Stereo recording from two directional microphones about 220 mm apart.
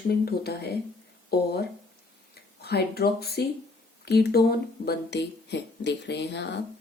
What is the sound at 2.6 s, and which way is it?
Speech, 45° left (ahead or behind).